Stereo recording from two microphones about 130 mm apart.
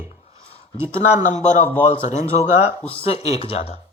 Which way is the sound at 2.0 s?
55° left (ahead or behind).